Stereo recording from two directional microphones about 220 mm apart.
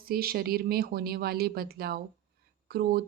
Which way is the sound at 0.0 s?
45° right (ahead or behind).